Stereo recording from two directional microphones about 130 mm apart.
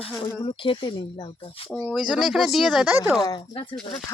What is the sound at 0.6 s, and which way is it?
Speech, 40° left (ahead or behind).